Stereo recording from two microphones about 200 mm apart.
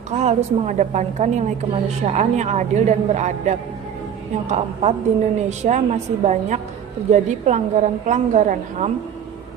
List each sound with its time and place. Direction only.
0.1 s a woman's voice: 35° right (ahead or behind)